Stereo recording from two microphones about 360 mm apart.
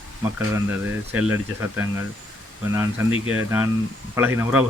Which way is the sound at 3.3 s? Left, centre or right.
Centre.